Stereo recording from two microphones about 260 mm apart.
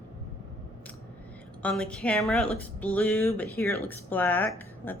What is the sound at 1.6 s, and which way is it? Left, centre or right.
Speech, centre.